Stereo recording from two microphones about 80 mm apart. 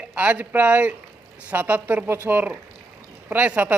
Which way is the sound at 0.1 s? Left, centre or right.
Centre.